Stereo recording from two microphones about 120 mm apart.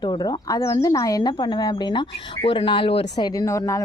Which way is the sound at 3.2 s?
30° left (ahead or behind).